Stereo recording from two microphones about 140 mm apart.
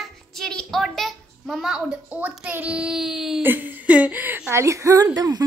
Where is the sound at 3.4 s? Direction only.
15° right (ahead or behind).